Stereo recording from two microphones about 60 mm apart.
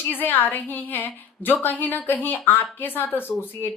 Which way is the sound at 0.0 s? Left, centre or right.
Left.